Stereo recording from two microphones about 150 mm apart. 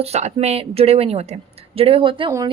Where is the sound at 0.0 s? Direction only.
45° right (ahead or behind).